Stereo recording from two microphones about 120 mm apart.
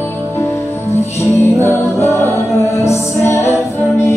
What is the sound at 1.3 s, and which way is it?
Music, 25° left (ahead or behind).